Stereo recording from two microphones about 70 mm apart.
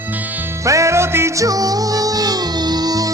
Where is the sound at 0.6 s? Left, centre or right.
Right.